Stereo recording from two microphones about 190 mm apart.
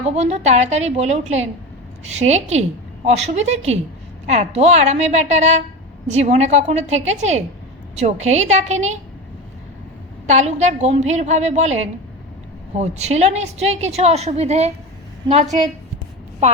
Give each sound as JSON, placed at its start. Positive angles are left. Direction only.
{"t": 0.0, "sound": "a woman's voice", "side_deg": -35}
{"t": 10.2, "sound": "a woman's voice", "side_deg": -40}